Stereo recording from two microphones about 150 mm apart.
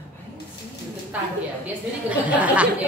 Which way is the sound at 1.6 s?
10° right (ahead or behind).